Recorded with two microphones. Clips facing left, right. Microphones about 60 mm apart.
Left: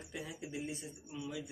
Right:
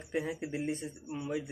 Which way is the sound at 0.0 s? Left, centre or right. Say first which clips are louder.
Right 10 dB; right.